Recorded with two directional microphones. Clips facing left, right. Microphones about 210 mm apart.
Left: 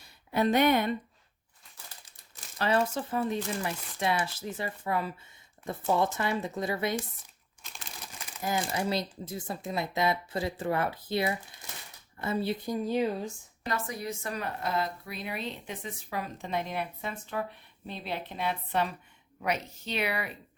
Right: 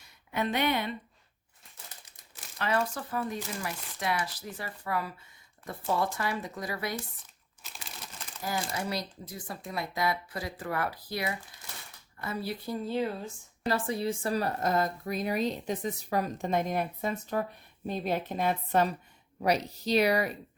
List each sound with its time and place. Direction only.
0.0 s speech: 35° left (ahead or behind)
2.6 s speech: 30° left (ahead or behind)
8.4 s speech: 20° left (ahead or behind)
13.7 s a woman's voice: 30° right (ahead or behind)